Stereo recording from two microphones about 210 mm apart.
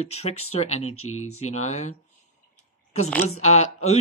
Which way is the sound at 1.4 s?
30° left (ahead or behind).